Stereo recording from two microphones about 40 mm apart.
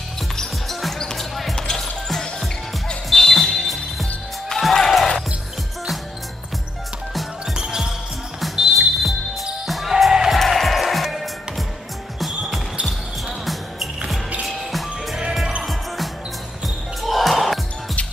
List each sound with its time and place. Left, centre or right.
0.7 s basketball bounce: centre
0.9 s basketball bounce: centre
1.3 s basketball bounce: centre
1.7 s music: centre
3.3 s music: centre
7.5 s music: centre
9.0 s music: centre
10.3 s music: centre
12.4 s basketball bounce: right
13.5 s music: centre
16.6 s basketball bounce: centre